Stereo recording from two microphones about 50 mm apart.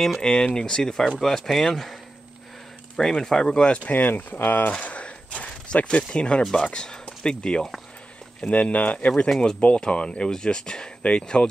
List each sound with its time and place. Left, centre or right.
0.2 s speech: centre
3.0 s speech: centre
3.9 s speech: left
4.8 s a sound: left
6.1 s speech: left